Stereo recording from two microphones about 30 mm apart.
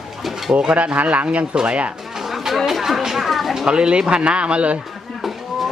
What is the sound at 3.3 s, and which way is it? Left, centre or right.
Bird, centre.